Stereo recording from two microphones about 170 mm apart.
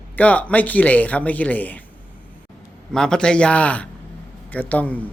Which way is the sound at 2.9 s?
5° left (ahead or behind).